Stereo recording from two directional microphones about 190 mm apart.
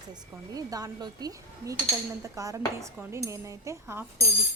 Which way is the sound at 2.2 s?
15° right (ahead or behind).